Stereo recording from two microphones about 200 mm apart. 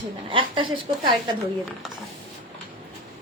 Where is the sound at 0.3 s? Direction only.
25° right (ahead or behind).